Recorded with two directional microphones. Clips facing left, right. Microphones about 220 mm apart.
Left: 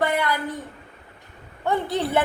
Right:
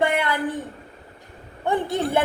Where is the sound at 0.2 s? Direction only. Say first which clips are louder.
Right 1 dB; 25° right (ahead or behind).